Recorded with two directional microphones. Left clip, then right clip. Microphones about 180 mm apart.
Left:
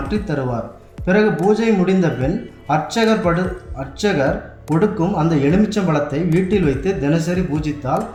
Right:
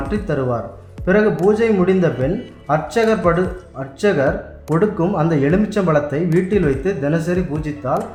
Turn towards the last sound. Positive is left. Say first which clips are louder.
# left 1 dB
turn(degrees=-35)  # may be behind; listen again after turning